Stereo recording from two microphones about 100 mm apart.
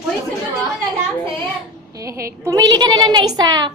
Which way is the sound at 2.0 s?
30° right (ahead or behind).